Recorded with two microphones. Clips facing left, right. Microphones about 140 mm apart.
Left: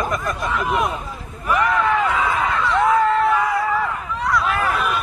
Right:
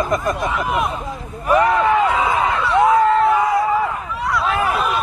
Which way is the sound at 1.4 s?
30° right (ahead or behind).